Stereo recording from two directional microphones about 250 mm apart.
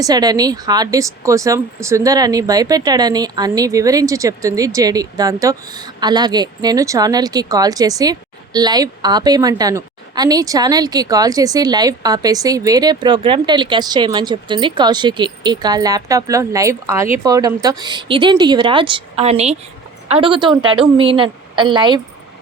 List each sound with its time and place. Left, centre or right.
0.0 s a woman's voice: centre